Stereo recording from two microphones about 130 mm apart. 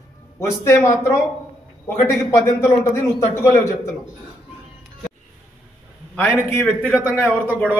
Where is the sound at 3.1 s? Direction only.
25° left (ahead or behind).